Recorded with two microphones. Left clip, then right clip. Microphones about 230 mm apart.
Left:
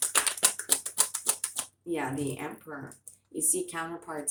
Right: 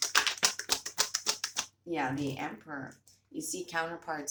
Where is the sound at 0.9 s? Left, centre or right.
Centre.